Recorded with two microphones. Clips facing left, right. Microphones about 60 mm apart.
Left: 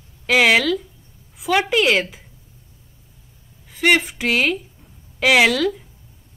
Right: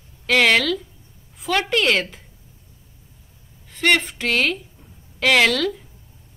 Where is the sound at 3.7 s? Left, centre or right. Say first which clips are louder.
Left 2 dB; centre.